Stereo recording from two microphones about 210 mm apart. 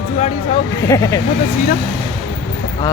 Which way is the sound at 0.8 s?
15° left (ahead or behind).